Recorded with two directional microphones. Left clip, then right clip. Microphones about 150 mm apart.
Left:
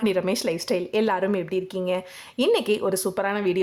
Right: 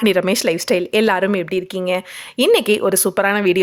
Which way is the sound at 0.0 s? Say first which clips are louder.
Right 8 dB; 25° right (ahead or behind).